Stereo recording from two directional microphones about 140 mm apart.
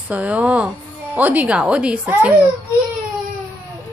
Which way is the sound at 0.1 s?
10° right (ahead or behind).